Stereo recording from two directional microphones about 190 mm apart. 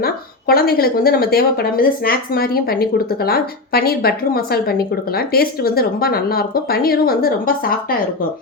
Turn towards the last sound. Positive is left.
turn(degrees=50)  # may be behind; listen again after turning